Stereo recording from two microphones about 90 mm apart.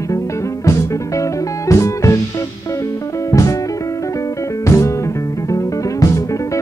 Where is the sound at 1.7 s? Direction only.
35° left (ahead or behind).